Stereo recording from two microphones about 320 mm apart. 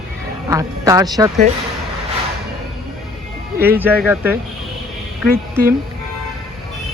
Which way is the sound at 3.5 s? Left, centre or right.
Centre.